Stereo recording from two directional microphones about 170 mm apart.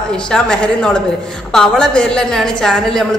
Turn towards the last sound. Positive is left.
turn(degrees=5)  # may be behind; listen again after turning